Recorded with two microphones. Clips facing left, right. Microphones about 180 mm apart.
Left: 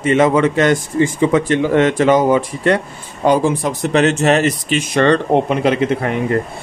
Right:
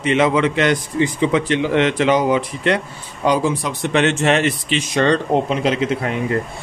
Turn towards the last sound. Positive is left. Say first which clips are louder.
# left 3 dB
turn(degrees=55)  # may be behind; listen again after turning